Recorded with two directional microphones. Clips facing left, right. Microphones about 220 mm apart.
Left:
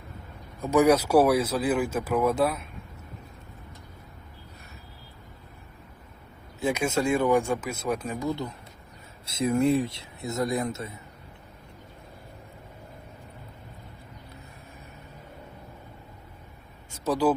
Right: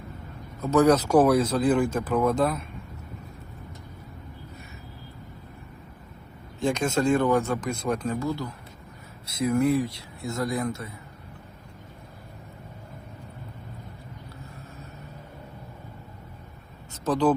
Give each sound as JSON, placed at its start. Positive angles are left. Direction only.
{"t": 0.6, "sound": "speech", "side_deg": 10}
{"t": 6.6, "sound": "speech", "side_deg": 5}
{"t": 16.9, "sound": "a sound", "side_deg": 10}